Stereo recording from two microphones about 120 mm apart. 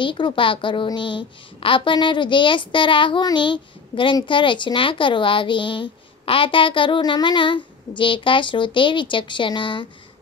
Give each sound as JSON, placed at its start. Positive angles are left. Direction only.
{"t": 0.0, "sound": "a woman's voice", "side_deg": 45}